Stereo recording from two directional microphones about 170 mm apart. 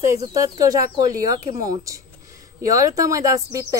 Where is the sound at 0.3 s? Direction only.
20° right (ahead or behind).